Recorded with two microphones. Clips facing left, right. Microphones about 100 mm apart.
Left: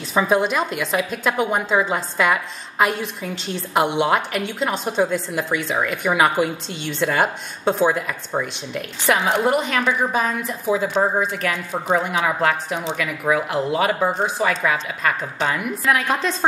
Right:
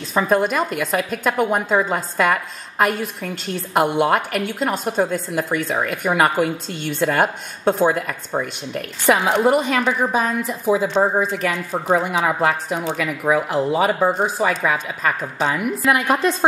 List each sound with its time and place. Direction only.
0.1 s speech: 5° left (ahead or behind)
9.0 s a woman's voice: 15° right (ahead or behind)
9.4 s a woman's voice: 5° right (ahead or behind)